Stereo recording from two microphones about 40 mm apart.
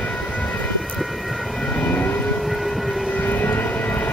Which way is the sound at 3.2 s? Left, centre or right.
Left.